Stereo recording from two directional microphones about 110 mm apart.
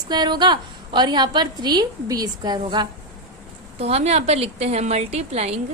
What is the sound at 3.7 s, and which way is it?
A woman's voice, 70° right (ahead or behind).